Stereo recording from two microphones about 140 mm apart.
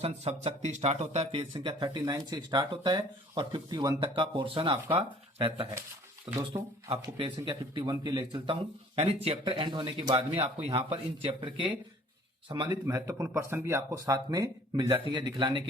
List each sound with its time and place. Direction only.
0.0 s speech: 50° right (ahead or behind)
6.5 s speech: 20° right (ahead or behind)
6.9 s speech: 40° right (ahead or behind)
9.0 s speech: 45° right (ahead or behind)
9.5 s speech: 35° right (ahead or behind)
12.9 s speech: 20° right (ahead or behind)